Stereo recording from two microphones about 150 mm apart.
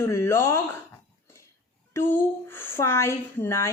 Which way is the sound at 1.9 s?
15° left (ahead or behind).